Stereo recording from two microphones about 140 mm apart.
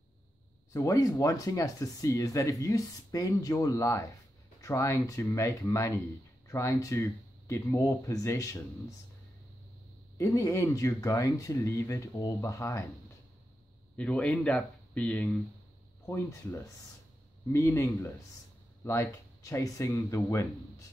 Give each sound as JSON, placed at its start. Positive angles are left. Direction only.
{"t": 0.7, "sound": "speech", "side_deg": 25}
{"t": 10.1, "sound": "speech", "side_deg": 20}
{"t": 13.9, "sound": "speech", "side_deg": 10}
{"t": 16.1, "sound": "speech", "side_deg": 20}